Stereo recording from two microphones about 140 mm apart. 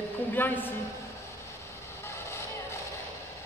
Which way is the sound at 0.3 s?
15° left (ahead or behind).